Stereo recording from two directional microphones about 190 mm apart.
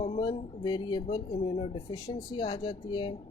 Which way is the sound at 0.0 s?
30° left (ahead or behind).